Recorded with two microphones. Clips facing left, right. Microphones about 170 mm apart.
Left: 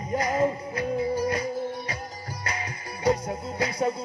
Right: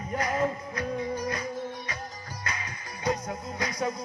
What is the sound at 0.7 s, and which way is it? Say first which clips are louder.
Music: left 5 dB; 30° left (ahead or behind).